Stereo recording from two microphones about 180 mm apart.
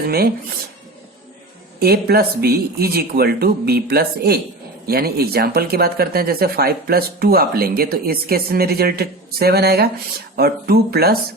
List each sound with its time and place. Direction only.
0.1 s speech: 60° right (ahead or behind)
1.8 s speech: 60° right (ahead or behind)